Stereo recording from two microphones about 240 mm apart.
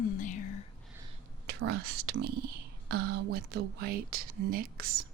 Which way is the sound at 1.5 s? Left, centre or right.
Right.